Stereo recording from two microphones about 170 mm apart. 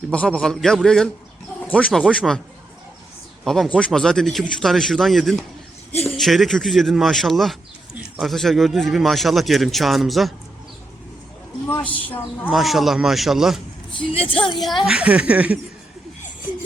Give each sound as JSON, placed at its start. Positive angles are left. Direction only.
{"t": 0.1, "sound": "a man's voice", "side_deg": 5}
{"t": 3.4, "sound": "a man's voice", "side_deg": 5}
{"t": 11.9, "sound": "speech", "side_deg": 10}
{"t": 12.5, "sound": "a man's voice", "side_deg": 0}
{"t": 13.9, "sound": "speech", "side_deg": 30}
{"t": 14.8, "sound": "speech", "side_deg": -5}